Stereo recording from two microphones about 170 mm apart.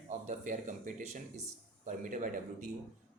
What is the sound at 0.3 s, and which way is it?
Speech, 50° right (ahead or behind).